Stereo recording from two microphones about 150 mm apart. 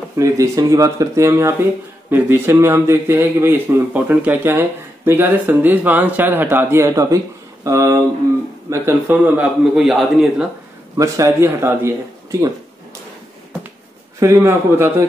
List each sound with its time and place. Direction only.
0.2 s speech: 20° right (ahead or behind)
9.0 s a man's voice: 10° right (ahead or behind)
11.0 s speech: 20° right (ahead or behind)
14.2 s speech: 15° right (ahead or behind)